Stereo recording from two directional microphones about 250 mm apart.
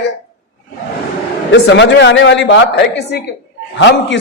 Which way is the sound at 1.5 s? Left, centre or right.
Left.